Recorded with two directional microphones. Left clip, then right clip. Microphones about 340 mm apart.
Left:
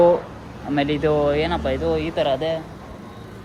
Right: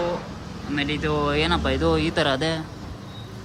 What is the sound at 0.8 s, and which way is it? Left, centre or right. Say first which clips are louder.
Speech: left 5 dB; centre.